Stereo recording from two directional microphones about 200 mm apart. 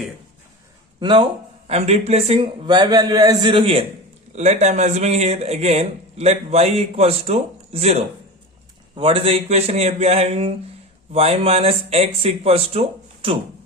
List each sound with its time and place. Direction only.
0.9 s speech: 25° right (ahead or behind)